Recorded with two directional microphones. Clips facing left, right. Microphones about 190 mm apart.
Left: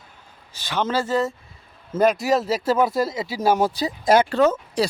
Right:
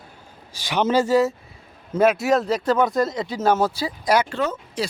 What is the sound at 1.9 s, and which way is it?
Speech, centre (ahead or behind).